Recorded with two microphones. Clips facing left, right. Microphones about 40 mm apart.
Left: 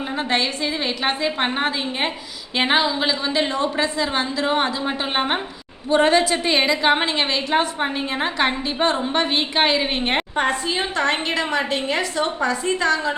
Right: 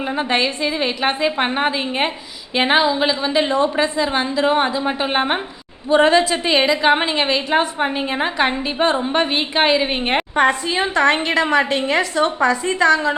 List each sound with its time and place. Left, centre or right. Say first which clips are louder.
0.2 s a woman's voice: right 2 dB; centre
2.6 s a woman's voice: right 3 dB; centre
6.9 s a woman's voice: right 3 dB; centre